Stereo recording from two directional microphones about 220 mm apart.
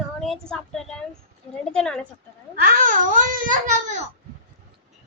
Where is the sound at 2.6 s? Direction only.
40° right (ahead or behind).